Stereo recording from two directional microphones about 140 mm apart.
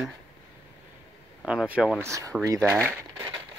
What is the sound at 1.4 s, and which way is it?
Speech, 5° right (ahead or behind).